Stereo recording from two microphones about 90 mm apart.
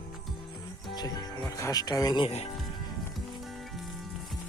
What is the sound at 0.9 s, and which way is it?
Music, 45° left (ahead or behind).